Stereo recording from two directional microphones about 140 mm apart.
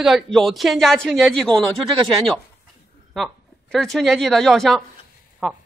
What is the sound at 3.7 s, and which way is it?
A woman's voice, centre (ahead or behind).